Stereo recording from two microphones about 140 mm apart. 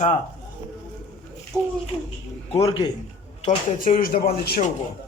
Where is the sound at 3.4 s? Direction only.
70° left (ahead or behind); by 4.7 s 90° left.